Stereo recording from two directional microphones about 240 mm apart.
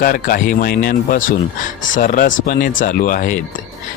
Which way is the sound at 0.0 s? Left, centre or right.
Left.